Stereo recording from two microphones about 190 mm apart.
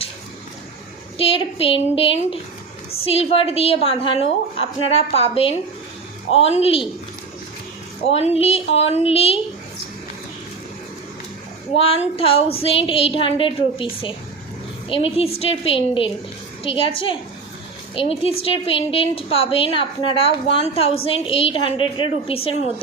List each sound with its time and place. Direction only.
1.2 s a woman's voice: 30° left (ahead or behind)
8.0 s a woman's voice: 30° left (ahead or behind)
11.7 s a woman's voice: 30° left (ahead or behind)
18.2 s a woman's voice: 30° left (ahead or behind)